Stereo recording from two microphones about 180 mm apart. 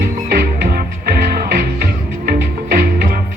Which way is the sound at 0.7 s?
60° right (ahead or behind).